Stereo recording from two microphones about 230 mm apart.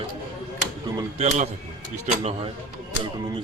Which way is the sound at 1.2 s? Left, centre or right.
Right.